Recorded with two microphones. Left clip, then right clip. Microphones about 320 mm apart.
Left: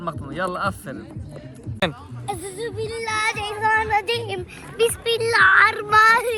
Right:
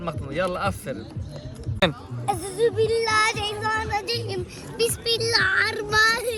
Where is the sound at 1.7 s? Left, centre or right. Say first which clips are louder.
Right 2 dB; centre.